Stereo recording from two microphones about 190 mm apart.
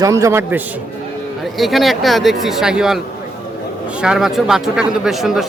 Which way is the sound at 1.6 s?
Centre (ahead or behind).